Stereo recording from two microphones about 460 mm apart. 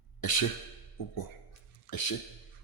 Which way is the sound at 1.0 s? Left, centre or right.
Left.